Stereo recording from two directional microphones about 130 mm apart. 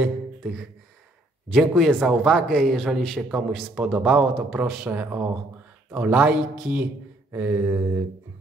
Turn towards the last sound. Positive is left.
turn(degrees=-15)  # may be behind; listen again after turning